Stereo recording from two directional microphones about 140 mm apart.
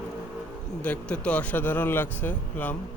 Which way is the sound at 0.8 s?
10° left (ahead or behind).